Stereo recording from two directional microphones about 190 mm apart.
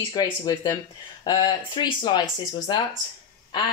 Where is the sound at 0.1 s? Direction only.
20° left (ahead or behind).